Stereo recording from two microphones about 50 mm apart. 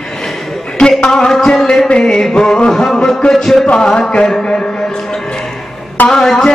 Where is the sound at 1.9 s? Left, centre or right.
Centre.